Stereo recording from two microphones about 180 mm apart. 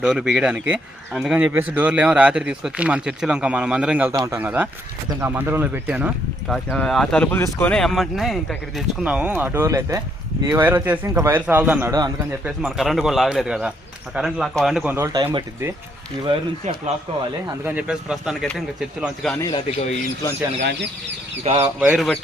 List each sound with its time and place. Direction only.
0.0 s speech: 5° right (ahead or behind); by 12.1 s 20° right (ahead or behind)
12.5 s speech: 5° right (ahead or behind)
14.9 s speech: 15° right (ahead or behind)
15.2 s speech: 30° right (ahead or behind)
17.7 s speech: 5° right (ahead or behind)
19.4 s a man's voice: 25° left (ahead or behind)
21.4 s speech: 35° right (ahead or behind)
21.8 s speech: 5° right (ahead or behind)